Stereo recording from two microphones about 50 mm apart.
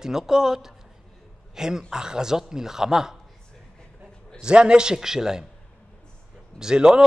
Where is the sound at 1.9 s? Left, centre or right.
Centre.